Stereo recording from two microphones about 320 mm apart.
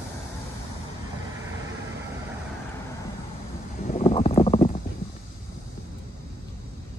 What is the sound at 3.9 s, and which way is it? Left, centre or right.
Stomach rumble, centre.